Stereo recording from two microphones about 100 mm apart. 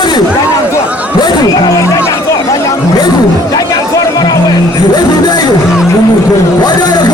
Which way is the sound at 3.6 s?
40° left (ahead or behind).